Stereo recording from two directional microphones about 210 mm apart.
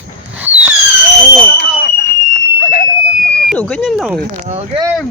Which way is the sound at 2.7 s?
40° left (ahead or behind).